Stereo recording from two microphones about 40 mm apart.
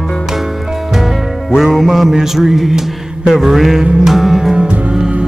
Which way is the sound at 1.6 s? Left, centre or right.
Centre.